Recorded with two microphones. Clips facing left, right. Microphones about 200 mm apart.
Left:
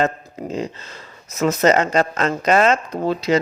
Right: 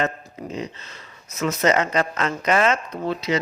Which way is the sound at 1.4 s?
40° left (ahead or behind).